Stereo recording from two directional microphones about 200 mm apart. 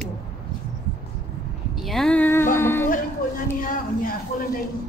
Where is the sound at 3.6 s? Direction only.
45° left (ahead or behind).